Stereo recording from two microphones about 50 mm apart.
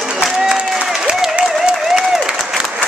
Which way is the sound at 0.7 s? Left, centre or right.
Centre.